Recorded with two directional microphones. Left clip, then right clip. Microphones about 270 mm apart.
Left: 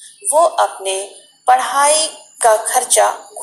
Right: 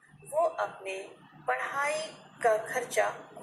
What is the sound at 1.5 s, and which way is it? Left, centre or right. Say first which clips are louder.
A woman's voice: left 18 dB; left.